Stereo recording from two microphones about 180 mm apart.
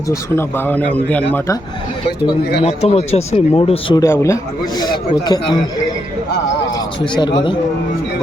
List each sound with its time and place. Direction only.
0.1 s speech: 10° left (ahead or behind)
2.6 s speech: 35° left (ahead or behind)
3.9 s a man's voice: 15° left (ahead or behind)
7.0 s a man's voice: 25° left (ahead or behind)